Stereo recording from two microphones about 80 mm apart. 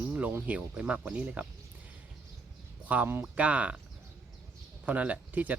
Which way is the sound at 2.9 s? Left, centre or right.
Right.